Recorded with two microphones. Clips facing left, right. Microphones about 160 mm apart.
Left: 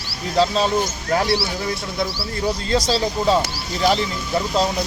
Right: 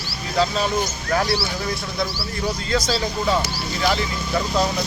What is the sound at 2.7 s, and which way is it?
Speech, 35° left (ahead or behind).